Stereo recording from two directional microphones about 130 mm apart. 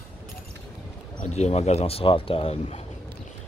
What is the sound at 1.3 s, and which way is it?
Speech, 55° left (ahead or behind).